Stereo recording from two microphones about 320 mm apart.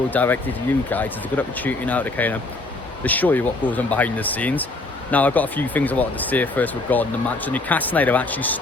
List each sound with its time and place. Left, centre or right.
0.1 s speech: centre